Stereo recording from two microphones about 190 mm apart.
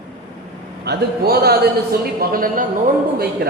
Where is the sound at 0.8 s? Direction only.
60° right (ahead or behind).